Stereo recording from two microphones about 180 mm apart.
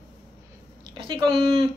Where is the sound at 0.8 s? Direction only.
25° right (ahead or behind).